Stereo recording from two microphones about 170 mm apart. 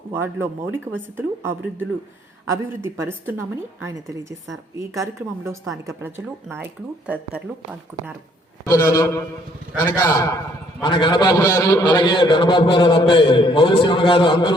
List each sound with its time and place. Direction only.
0.1 s a woman's voice: 15° right (ahead or behind)
5.5 s a woman's voice: 20° right (ahead or behind)
8.6 s a man's voice: 15° left (ahead or behind)